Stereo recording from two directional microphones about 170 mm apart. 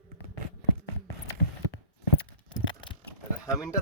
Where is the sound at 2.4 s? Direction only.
30° left (ahead or behind).